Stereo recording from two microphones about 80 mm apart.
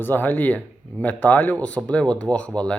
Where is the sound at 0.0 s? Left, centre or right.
Left.